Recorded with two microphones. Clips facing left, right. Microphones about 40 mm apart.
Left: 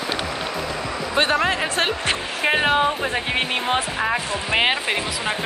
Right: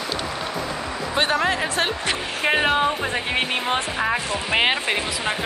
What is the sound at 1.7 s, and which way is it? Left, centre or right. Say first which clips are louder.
Speech: left 1 dB; left.